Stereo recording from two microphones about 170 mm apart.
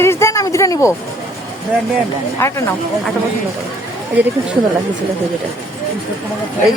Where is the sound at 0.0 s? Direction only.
15° left (ahead or behind).